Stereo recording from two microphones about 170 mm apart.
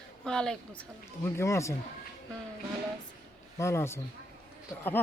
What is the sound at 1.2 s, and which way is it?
Speech, 15° left (ahead or behind).